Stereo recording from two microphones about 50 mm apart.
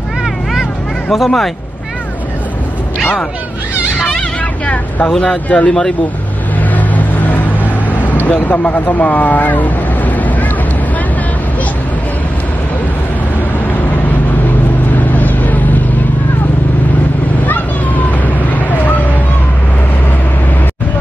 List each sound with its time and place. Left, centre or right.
1.1 s speech: centre
4.6 s speech: left
5.7 s speech: centre
6.7 s vehicle: left
8.5 s speech: left
15.0 s vehicle: left
18.2 s vehicle: left